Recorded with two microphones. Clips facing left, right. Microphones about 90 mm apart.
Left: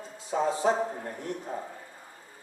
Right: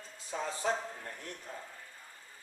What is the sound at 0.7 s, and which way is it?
Speech, 40° left (ahead or behind).